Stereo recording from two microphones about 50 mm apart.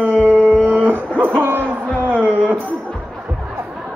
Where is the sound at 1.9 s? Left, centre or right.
Right.